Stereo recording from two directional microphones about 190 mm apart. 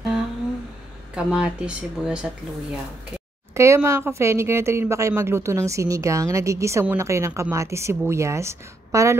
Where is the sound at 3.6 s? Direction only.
15° right (ahead or behind).